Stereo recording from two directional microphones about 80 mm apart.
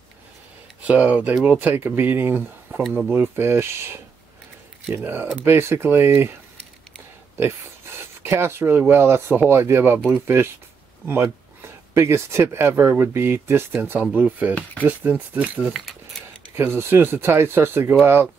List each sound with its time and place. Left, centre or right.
0.8 s speech: centre
2.7 s a sound: right
3.1 s speech: right
8.0 s speech: right; by 15.7 s centre
16.5 s speech: right